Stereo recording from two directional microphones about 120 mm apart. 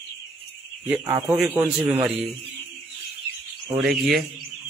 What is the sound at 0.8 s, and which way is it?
Speech, 15° right (ahead or behind).